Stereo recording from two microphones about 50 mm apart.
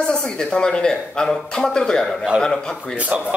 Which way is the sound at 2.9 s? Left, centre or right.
Right.